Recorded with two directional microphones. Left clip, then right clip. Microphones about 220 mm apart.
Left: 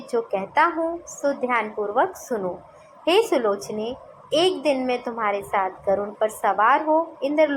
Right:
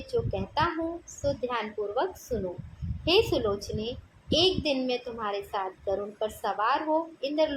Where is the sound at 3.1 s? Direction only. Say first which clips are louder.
Left 5 dB; 10° left (ahead or behind).